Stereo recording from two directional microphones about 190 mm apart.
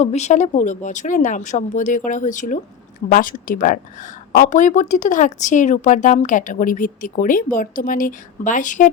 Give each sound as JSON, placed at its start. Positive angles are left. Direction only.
{"t": 0.0, "sound": "a woman's voice", "side_deg": 35}